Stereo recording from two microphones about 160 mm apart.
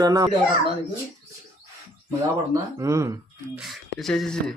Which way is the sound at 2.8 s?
20° right (ahead or behind).